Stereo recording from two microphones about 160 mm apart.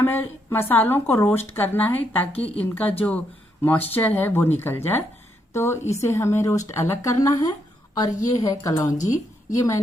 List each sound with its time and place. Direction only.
0.0 s a woman's voice: 15° left (ahead or behind)
8.9 s a woman's voice: 50° left (ahead or behind)